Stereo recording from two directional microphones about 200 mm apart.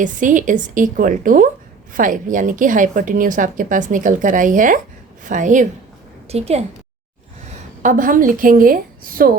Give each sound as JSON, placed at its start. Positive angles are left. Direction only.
{"t": 0.0, "sound": "a woman's voice", "side_deg": -40}